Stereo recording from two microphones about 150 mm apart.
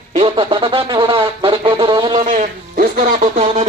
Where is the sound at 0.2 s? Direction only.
35° right (ahead or behind).